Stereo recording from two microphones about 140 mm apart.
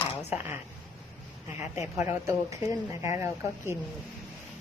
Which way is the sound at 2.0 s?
20° right (ahead or behind).